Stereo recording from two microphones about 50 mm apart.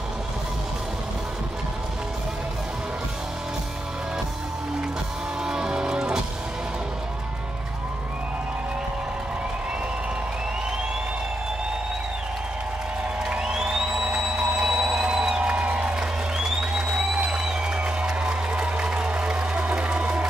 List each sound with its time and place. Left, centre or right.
5.4 s music: centre
13.2 s music: centre
15.9 s music: centre